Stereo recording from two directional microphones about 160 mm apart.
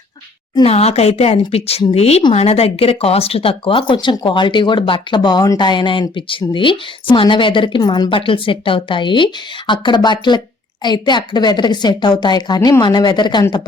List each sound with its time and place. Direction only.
0.5 s a woman's voice: 40° left (ahead or behind)